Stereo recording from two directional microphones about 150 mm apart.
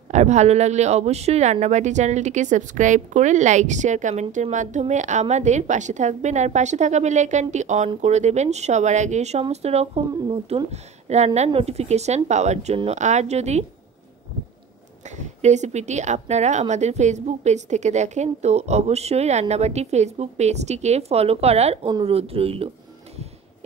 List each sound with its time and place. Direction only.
0.1 s speech: 50° right (ahead or behind)
15.0 s speech: 50° right (ahead or behind)